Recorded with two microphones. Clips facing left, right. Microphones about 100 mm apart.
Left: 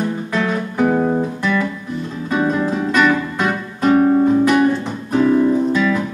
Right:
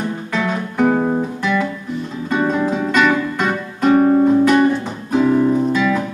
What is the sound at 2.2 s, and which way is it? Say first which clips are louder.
Music: even; 5° left (ahead or behind).